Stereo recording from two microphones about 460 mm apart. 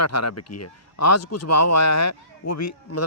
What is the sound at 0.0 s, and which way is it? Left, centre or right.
Speech, left.